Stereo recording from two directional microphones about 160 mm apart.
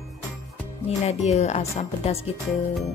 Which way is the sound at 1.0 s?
40° left (ahead or behind).